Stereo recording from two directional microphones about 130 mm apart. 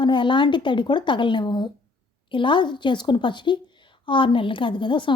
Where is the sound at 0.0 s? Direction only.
40° left (ahead or behind).